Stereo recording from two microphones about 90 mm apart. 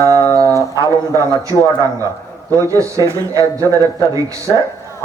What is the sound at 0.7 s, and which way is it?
A man's voice, 40° right (ahead or behind).